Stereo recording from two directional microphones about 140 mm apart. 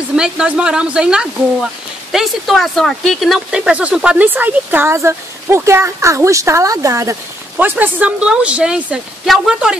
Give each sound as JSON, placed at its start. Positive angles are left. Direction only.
{"t": 0.1, "sound": "speech", "side_deg": -5}